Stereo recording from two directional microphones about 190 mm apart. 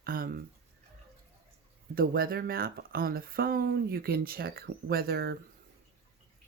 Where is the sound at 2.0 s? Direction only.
50° right (ahead or behind).